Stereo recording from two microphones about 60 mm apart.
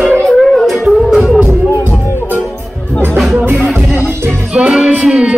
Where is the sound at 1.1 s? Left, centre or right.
Centre.